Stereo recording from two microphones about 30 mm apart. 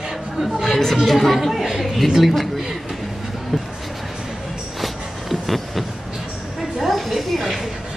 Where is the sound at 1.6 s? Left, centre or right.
Centre.